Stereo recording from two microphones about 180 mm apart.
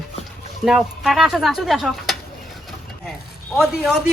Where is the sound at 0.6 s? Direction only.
Centre (ahead or behind).